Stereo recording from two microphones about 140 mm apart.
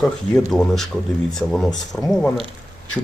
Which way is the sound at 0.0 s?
Centre (ahead or behind).